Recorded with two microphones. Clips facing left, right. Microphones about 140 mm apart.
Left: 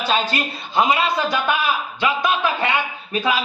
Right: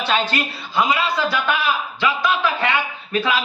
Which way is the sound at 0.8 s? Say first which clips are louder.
Left 1 dB; 25° left (ahead or behind).